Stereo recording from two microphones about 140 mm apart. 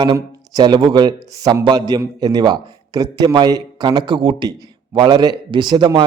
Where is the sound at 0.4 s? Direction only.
30° right (ahead or behind).